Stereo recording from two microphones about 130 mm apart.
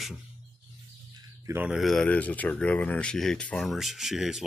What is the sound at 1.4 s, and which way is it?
Speech, 20° right (ahead or behind).